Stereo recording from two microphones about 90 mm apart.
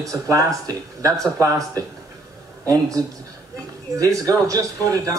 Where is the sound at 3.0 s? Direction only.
40° right (ahead or behind).